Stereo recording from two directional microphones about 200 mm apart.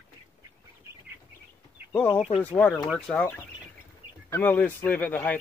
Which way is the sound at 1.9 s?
10° left (ahead or behind).